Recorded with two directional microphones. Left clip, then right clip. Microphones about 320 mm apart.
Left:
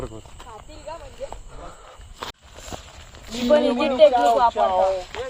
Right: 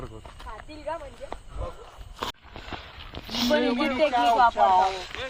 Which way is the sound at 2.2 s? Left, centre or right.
Centre.